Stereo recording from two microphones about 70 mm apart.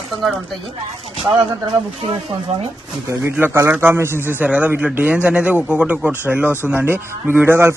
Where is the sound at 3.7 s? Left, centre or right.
Right; by 6.1 s centre.